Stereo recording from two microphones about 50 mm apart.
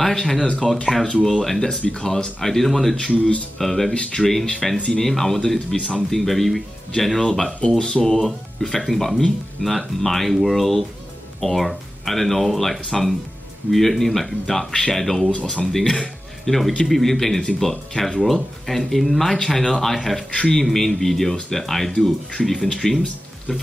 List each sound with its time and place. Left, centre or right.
0.0 s speech: centre
3.9 s speech: centre
4.3 s speech: centre
8.2 s speech: centre
20.2 s speech: centre
20.6 s speech: centre
23.0 s a sound: left